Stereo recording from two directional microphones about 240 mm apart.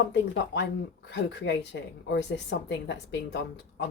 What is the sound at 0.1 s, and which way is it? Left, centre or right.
A woman's voice, left.